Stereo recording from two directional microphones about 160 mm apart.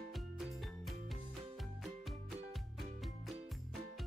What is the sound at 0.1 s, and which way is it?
Music, centre (ahead or behind).